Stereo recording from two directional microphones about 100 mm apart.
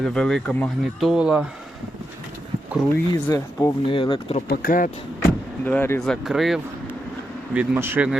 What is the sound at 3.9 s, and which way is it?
Speech, 65° left (ahead or behind).